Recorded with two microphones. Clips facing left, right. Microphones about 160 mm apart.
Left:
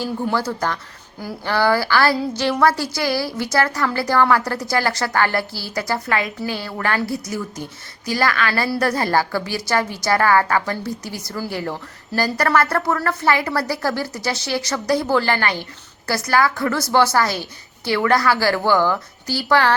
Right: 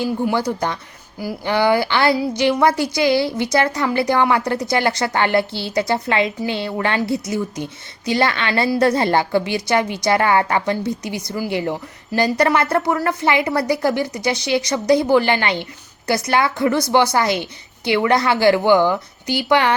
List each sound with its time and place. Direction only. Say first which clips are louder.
0.0 s a woman's voice: right 3 dB; 15° right (ahead or behind)